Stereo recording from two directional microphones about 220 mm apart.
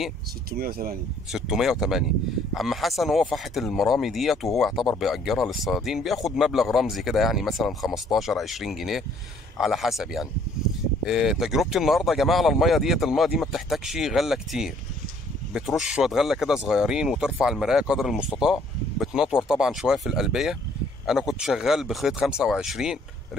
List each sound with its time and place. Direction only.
0.5 s speech: 40° right (ahead or behind)
1.3 s speech: centre (ahead or behind)